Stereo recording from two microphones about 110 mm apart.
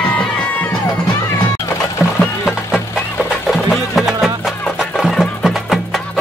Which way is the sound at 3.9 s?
Centre (ahead or behind).